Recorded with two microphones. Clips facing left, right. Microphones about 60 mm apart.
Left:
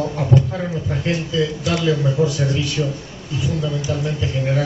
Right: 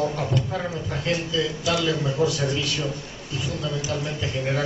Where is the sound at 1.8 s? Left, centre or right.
Centre.